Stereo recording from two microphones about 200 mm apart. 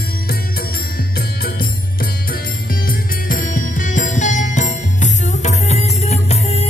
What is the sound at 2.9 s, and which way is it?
Music, 45° left (ahead or behind).